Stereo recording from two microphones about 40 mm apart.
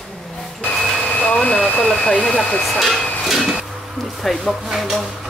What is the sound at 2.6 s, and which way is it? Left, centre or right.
Speech, centre.